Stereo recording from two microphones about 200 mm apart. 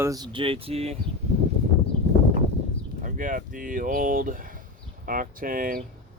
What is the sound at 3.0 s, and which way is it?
Speech, 40° right (ahead or behind).